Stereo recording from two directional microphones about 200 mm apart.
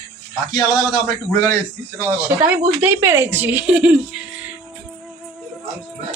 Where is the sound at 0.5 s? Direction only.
20° left (ahead or behind).